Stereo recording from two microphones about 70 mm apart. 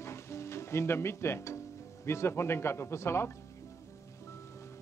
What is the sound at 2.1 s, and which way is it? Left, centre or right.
Speech, left.